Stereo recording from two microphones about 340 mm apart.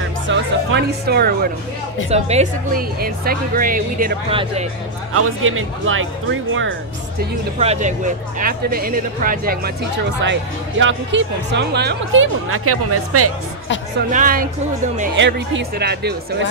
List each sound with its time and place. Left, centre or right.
0.3 s a woman's voice: right
5.1 s speech: right
7.2 s a woman's voice: centre; by 13.3 s right
14.1 s a woman's voice: right